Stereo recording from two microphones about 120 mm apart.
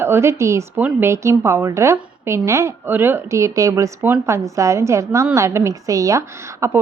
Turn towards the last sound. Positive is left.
turn(degrees=-25)  # may be behind; listen again after turning